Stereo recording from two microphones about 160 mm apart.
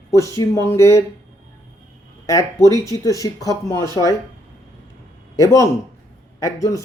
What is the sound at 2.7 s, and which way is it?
Speech, 20° left (ahead or behind).